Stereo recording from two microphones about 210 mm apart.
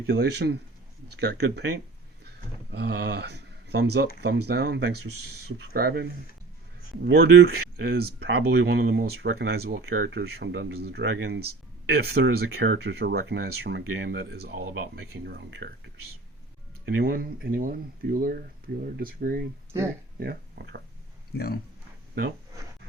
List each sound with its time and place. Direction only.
0.1 s speech: 50° right (ahead or behind)
2.7 s speech: 50° right (ahead or behind)
19.7 s speech: 10° right (ahead or behind)
20.1 s speech: 50° right (ahead or behind)
21.3 s speech: 45° left (ahead or behind)